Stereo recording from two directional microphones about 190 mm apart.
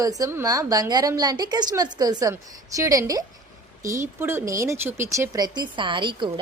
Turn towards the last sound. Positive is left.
turn(degrees=-25)  # may be behind; listen again after turning